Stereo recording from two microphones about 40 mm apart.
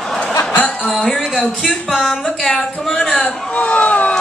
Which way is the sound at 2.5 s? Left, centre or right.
Left.